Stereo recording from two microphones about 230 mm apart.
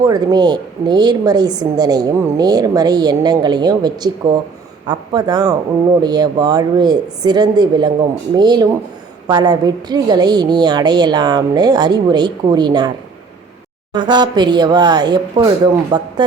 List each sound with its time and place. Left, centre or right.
0.0 s speech: centre
13.9 s speech: centre